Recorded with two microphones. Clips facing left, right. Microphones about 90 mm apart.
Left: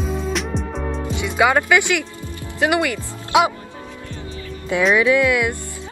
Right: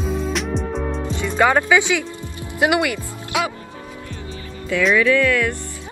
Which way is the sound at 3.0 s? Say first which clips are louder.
Left 6 dB; 20° left (ahead or behind).